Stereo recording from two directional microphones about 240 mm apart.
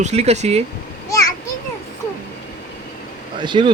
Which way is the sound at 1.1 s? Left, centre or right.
Centre.